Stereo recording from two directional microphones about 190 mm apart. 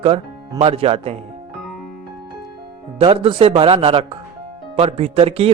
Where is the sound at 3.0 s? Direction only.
30° right (ahead or behind).